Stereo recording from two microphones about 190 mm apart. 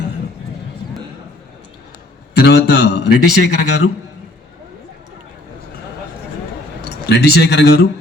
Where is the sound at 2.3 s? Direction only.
60° left (ahead or behind).